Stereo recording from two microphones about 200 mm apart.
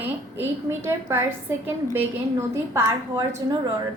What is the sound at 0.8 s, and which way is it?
A woman's voice, 15° right (ahead or behind).